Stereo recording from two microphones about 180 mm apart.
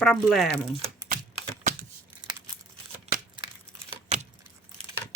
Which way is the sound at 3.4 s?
30° right (ahead or behind).